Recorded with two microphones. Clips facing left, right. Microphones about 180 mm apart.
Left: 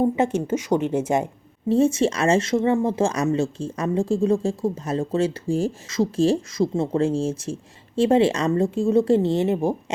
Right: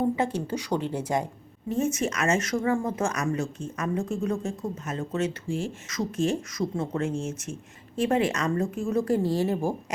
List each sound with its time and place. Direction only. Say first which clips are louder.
0.0 s speech: left 5 dB; 25° left (ahead or behind)